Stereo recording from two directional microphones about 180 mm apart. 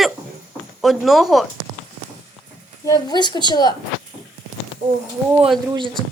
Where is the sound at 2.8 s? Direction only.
20° left (ahead or behind).